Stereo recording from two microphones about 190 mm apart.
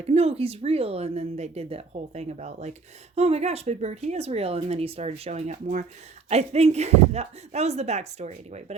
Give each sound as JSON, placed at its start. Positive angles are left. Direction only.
{"t": 0.0, "sound": "speech", "side_deg": -35}